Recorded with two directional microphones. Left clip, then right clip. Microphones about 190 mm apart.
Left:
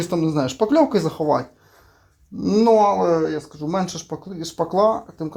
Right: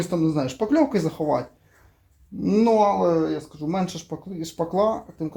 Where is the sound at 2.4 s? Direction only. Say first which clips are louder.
Left 3 dB; 20° left (ahead or behind).